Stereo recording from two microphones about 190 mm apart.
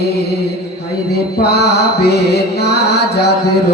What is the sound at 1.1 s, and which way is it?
Mantra, 60° left (ahead or behind).